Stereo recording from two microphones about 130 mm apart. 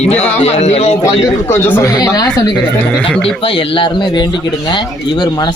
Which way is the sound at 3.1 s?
5° left (ahead or behind).